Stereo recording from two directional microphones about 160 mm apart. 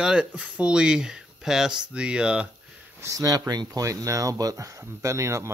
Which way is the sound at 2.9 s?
20° right (ahead or behind).